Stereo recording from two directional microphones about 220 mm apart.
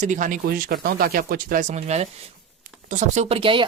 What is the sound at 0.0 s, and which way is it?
Speech, 35° right (ahead or behind).